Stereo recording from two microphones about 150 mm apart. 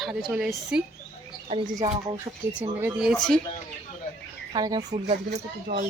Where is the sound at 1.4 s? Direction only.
40° right (ahead or behind).